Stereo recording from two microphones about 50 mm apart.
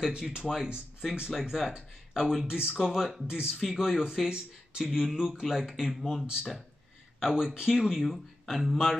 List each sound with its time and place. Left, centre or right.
0.2 s speech: centre
2.7 s speech: centre
7.2 s speech: centre